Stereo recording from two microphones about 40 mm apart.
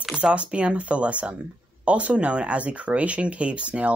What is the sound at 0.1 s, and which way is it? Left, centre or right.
Speech, right.